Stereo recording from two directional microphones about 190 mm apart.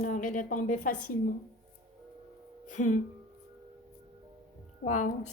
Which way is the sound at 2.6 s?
40° left (ahead or behind).